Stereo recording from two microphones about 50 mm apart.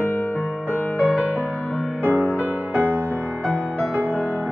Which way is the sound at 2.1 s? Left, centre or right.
Left.